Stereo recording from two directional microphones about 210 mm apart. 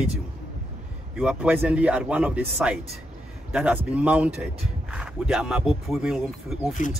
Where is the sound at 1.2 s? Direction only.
5° right (ahead or behind).